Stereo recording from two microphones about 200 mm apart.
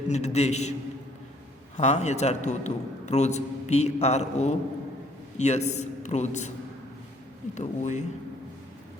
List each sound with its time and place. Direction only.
0.1 s a man's voice: 35° left (ahead or behind)
1.7 s a man's voice: 35° left (ahead or behind)
7.5 s a man's voice: 35° left (ahead or behind)